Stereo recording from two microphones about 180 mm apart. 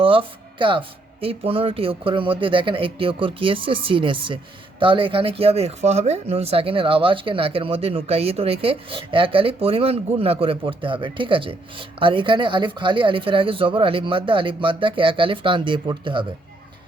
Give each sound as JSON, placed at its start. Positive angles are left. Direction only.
{"t": 0.0, "sound": "speech", "side_deg": -30}